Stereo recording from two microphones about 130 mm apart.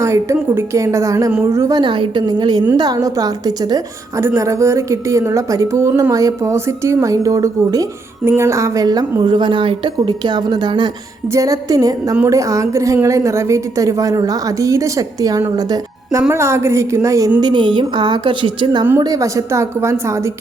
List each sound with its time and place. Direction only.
0.0 s a woman's voice: 20° right (ahead or behind)
1.8 s a woman's voice: 40° right (ahead or behind)
17.4 s a woman's voice: 35° right (ahead or behind)
18.9 s a woman's voice: 25° right (ahead or behind)